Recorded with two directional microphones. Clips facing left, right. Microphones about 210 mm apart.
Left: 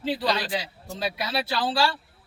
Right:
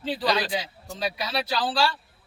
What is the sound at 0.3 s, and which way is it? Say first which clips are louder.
A man's voice: right 1 dB; 5° right (ahead or behind).